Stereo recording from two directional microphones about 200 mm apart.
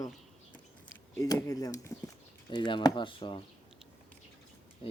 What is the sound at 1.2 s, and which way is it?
Speech, 15° left (ahead or behind).